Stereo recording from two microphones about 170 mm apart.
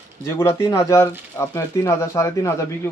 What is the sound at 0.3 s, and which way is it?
Speech, 15° left (ahead or behind).